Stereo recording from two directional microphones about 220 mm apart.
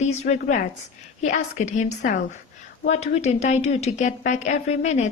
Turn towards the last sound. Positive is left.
turn(degrees=30)  # may be behind; listen again after turning